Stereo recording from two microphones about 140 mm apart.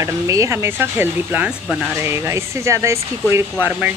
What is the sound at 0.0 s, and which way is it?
Speech, 20° right (ahead or behind).